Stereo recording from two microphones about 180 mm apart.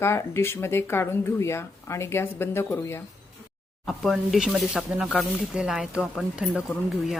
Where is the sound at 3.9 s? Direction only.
Centre (ahead or behind).